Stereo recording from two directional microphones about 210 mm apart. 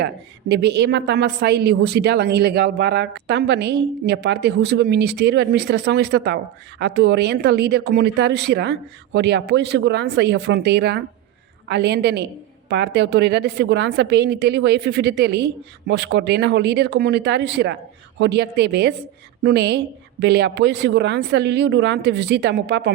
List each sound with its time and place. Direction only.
0.0 s a woman's voice: 50° right (ahead or behind)